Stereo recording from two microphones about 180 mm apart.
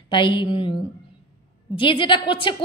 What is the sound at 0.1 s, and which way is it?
Speech, 25° left (ahead or behind).